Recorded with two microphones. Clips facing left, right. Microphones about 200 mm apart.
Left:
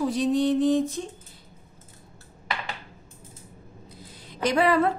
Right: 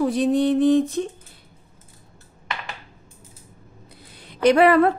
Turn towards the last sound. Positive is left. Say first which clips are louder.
# right 7 dB
turn(degrees=-65)  # may be behind; listen again after turning